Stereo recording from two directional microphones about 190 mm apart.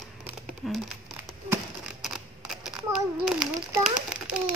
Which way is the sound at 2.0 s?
Centre (ahead or behind).